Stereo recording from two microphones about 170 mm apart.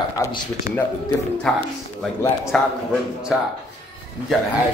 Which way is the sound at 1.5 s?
5° left (ahead or behind).